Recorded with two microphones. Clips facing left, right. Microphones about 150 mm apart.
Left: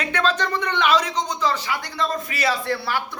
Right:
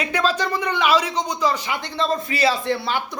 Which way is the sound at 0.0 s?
10° right (ahead or behind).